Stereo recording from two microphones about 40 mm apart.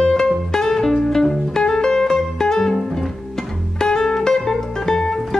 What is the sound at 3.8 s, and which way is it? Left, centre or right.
Music, centre.